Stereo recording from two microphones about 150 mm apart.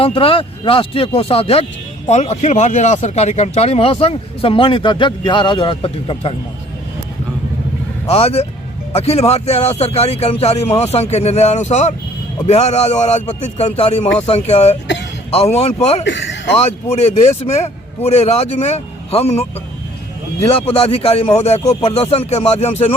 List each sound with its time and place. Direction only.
0.0 s speech: 40° left (ahead or behind)
8.0 s speech: 45° left (ahead or behind)
20.5 s speech: 40° left (ahead or behind)